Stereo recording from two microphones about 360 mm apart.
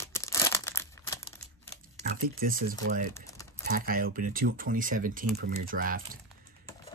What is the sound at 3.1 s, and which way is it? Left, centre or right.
Typing, centre.